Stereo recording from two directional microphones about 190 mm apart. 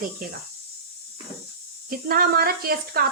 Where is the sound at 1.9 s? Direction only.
50° right (ahead or behind).